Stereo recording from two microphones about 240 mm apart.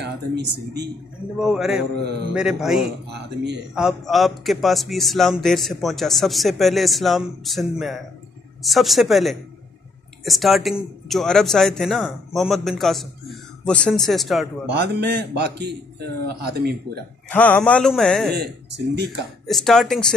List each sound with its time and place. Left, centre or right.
0.0 s a man's voice: right
1.4 s a man's voice: centre
3.1 s a man's voice: right
3.7 s a man's voice: centre
14.7 s a man's voice: right
17.3 s a man's voice: centre
18.3 s a man's voice: right
19.4 s a man's voice: centre